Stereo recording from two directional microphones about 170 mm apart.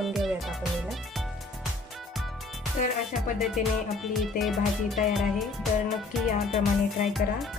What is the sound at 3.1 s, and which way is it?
Music, centre (ahead or behind).